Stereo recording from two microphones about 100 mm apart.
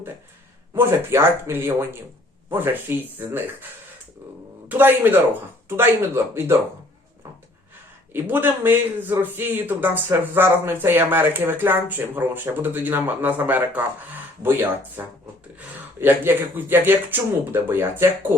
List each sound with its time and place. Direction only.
0.7 s a man's voice: 25° right (ahead or behind)
4.7 s a man's voice: 20° right (ahead or behind)
8.1 s a man's voice: 20° right (ahead or behind)